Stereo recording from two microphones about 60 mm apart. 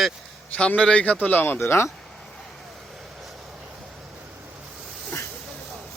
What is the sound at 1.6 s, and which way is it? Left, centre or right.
Speech, left.